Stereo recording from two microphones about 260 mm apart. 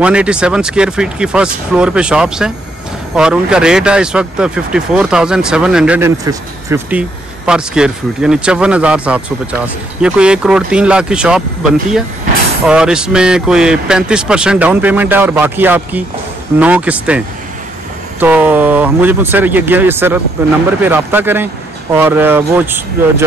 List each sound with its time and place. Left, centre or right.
0.0 s speech: centre
12.6 s speech: centre
18.2 s speech: centre